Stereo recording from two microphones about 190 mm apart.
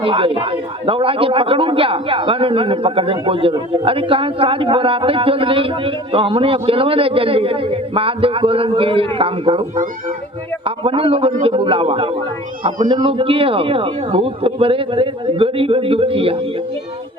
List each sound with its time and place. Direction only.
0.0 s speech: 30° right (ahead or behind)
10.8 s speech: 30° right (ahead or behind)